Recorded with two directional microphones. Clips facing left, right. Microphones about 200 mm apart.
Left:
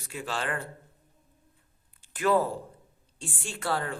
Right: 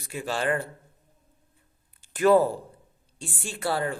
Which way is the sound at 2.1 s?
40° right (ahead or behind).